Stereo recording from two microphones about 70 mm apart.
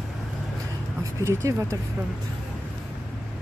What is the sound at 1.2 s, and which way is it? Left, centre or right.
Speech, right.